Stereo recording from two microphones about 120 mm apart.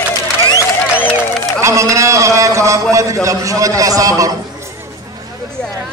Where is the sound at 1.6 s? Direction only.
25° right (ahead or behind).